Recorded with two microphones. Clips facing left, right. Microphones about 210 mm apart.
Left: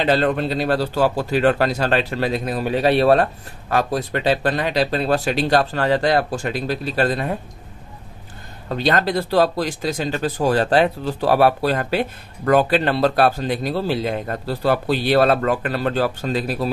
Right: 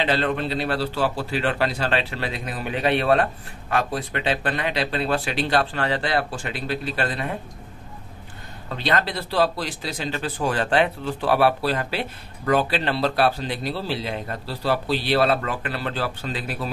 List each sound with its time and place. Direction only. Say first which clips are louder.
0.0 s speech: left 5 dB; 45° left (ahead or behind)
8.6 s speech: left 5 dB; 40° left (ahead or behind)